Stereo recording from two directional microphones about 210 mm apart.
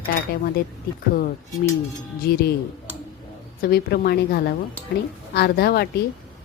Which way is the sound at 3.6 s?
45° left (ahead or behind).